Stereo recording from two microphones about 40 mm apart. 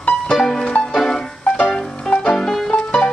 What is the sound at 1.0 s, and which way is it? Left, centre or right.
Music, centre.